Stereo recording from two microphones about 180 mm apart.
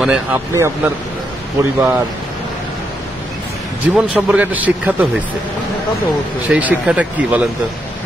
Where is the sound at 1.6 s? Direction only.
15° right (ahead or behind).